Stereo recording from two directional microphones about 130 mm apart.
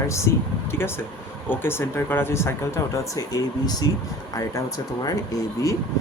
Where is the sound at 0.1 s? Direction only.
20° left (ahead or behind).